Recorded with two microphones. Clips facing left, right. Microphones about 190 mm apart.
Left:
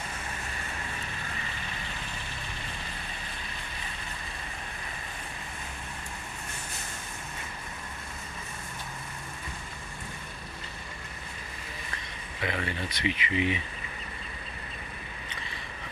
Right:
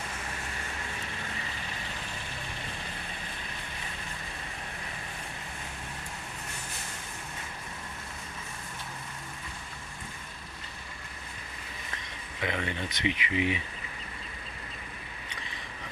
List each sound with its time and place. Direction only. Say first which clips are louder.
12.4 s speech: even; 20° right (ahead or behind)